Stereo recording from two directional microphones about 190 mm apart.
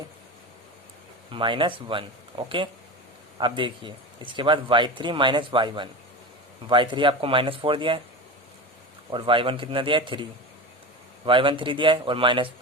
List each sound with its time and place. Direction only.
1.3 s speech: 25° right (ahead or behind)
9.1 s speech: 25° right (ahead or behind)
11.3 s speech: 25° right (ahead or behind)